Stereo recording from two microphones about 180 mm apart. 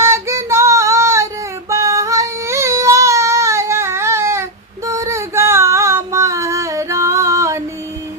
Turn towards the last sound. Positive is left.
turn(degrees=-15)  # may be behind; listen again after turning